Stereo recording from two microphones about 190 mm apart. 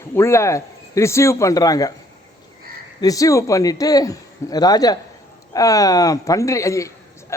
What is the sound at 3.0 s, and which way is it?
Speech, 20° left (ahead or behind).